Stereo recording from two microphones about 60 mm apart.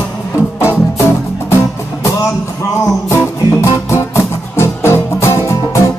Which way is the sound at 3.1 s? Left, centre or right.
Left.